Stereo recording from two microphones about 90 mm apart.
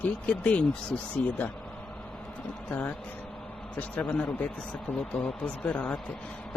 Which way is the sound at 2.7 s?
20° left (ahead or behind).